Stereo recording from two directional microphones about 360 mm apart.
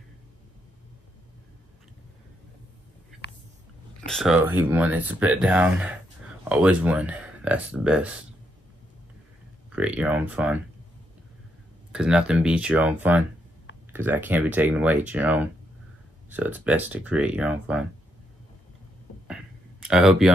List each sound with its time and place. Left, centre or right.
3.2 s a sound: left
4.0 s speech: centre
9.8 s speech: centre
11.9 s speech: centre
19.8 s speech: centre